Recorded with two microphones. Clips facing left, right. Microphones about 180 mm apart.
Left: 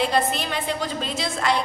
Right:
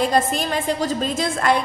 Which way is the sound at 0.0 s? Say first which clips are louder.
Right 3 dB; 45° right (ahead or behind).